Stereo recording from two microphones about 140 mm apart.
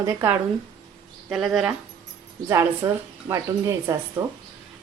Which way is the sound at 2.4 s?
20° right (ahead or behind).